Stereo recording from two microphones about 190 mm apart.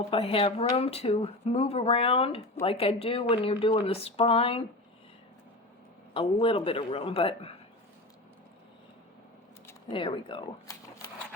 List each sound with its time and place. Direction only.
0.1 s speech: 30° left (ahead or behind)
6.1 s speech: 30° left (ahead or behind)
9.9 s speech: 25° left (ahead or behind)